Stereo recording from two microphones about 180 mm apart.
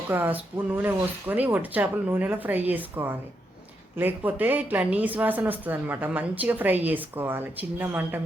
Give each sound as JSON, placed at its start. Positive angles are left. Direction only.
{"t": 0.1, "sound": "a woman's voice", "side_deg": -10}